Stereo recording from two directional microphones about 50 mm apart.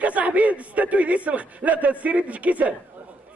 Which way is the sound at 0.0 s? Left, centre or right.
Right.